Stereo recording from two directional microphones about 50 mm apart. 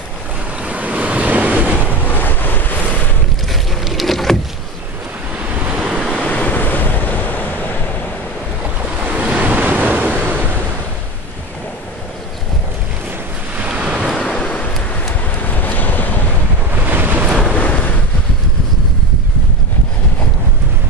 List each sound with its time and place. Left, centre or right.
0.7 s waves: right
1.9 s waves: left
3.8 s vehicle: centre
5.6 s waves: right
6.1 s waves: left
9.0 s waves: right
13.6 s waves: right
14.2 s a sound: left
15.4 s vehicle: left
16.8 s waves: right
17.6 s waves: left